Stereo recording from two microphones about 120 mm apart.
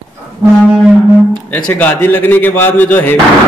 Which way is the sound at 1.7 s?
15° left (ahead or behind).